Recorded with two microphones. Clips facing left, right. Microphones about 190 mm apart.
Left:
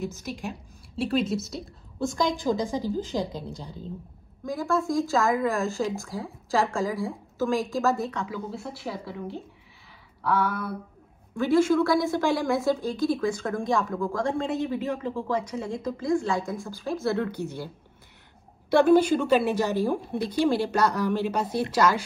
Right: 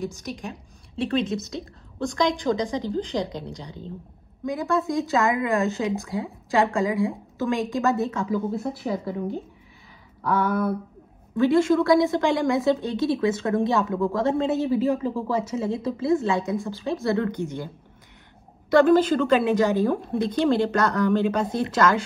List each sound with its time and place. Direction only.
0.1 s a man's voice: 5° left (ahead or behind)
8.3 s speech: 50° right (ahead or behind)
11.5 s a man's voice: 5° left (ahead or behind)
18.8 s a woman's voice: 10° left (ahead or behind)